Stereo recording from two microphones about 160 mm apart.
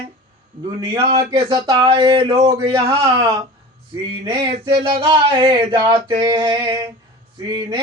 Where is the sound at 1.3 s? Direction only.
35° right (ahead or behind).